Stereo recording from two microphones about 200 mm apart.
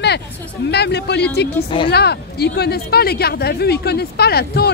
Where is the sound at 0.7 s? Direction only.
55° left (ahead or behind).